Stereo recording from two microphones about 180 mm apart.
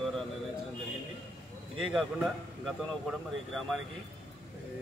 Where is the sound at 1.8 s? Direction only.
Centre (ahead or behind).